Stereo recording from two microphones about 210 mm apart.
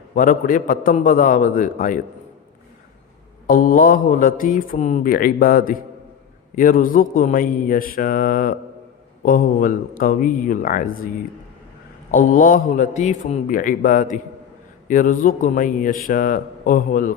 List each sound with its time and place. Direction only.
0.1 s speech: 40° left (ahead or behind)
3.4 s speech: 40° left (ahead or behind)
12.1 s speech: 40° left (ahead or behind)